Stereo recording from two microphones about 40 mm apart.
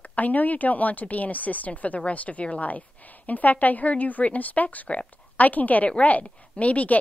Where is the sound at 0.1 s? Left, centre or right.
Left.